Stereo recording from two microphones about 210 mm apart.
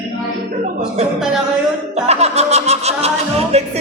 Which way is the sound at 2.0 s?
30° right (ahead or behind).